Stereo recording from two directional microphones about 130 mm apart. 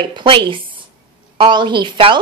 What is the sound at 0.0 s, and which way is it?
A woman's voice, 40° right (ahead or behind).